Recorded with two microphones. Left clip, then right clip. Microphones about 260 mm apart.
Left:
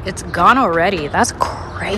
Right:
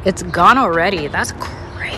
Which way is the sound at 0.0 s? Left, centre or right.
Centre.